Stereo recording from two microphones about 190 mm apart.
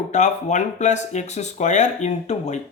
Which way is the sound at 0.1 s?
40° left (ahead or behind).